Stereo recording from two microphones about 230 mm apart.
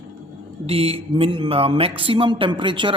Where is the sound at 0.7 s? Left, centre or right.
Right.